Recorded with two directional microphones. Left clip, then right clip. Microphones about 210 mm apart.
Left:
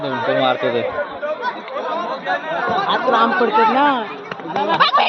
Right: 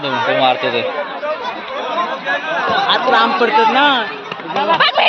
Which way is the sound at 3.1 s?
60° left (ahead or behind).